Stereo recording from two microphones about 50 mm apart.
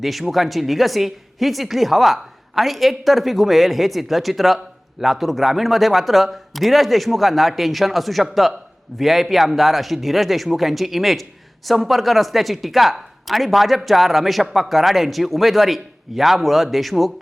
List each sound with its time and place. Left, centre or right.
0.0 s a woman's voice: centre